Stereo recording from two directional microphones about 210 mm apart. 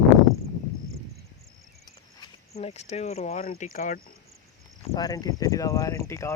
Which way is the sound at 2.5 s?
30° left (ahead or behind).